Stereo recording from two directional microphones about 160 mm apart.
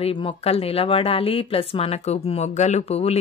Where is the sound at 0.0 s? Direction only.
35° left (ahead or behind).